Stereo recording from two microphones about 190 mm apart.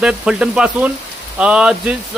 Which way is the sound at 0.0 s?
5° right (ahead or behind).